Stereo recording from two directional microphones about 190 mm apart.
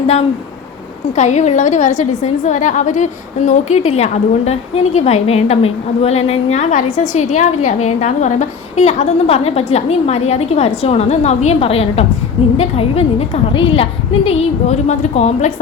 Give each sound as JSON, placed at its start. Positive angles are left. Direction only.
{"t": 1.1, "sound": "a woman's voice", "side_deg": 40}